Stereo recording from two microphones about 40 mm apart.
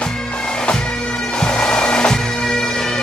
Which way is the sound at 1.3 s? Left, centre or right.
Left.